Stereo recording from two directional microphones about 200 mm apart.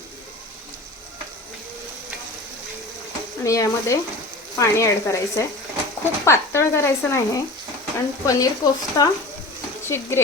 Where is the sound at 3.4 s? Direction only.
15° left (ahead or behind).